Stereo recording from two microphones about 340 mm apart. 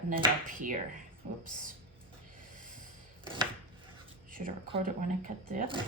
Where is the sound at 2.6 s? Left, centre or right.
Right.